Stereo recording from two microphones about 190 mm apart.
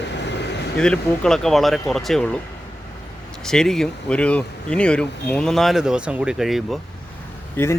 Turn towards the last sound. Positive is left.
turn(degrees=10)  # may be behind; listen again after turning